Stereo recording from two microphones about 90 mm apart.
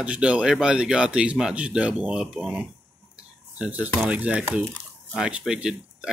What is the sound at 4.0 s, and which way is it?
Speech, 15° right (ahead or behind).